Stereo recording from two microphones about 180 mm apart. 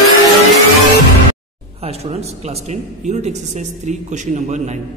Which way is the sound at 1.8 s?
35° right (ahead or behind).